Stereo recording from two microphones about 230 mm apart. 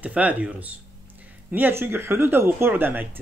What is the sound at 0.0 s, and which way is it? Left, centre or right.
Speech, centre.